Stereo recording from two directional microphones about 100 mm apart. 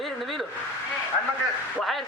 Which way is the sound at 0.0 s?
Centre (ahead or behind).